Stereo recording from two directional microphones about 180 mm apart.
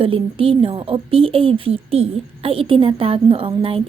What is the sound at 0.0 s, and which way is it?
A woman's voice, 30° right (ahead or behind).